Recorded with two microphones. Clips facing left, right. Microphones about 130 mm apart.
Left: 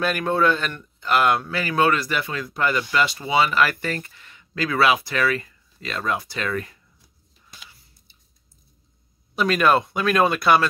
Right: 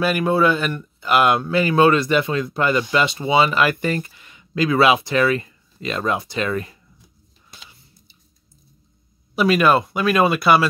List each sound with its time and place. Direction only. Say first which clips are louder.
0.0 s speech: right 3 dB; 5° right (ahead or behind); by 6.8 s 20° right (ahead or behind)
7.5 s a sound: right 2 dB; 25° right (ahead or behind)
9.3 s speech: right 3 dB; 5° right (ahead or behind)